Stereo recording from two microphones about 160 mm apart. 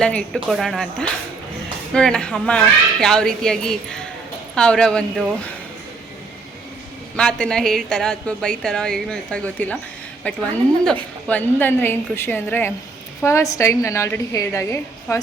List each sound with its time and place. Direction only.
0.0 s a woman's voice: 5° left (ahead or behind)
7.2 s a woman's voice: 5° left (ahead or behind)